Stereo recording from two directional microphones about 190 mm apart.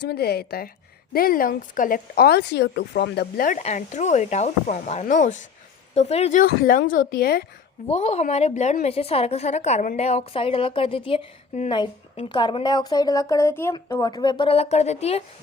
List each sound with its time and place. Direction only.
0.0 s a woman's voice: 55° left (ahead or behind)
7.9 s a woman's voice: 30° left (ahead or behind)